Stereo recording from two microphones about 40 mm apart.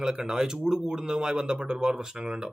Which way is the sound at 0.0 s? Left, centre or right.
Centre.